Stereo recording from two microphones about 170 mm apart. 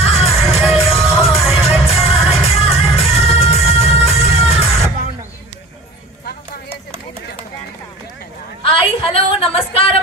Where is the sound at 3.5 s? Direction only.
35° left (ahead or behind).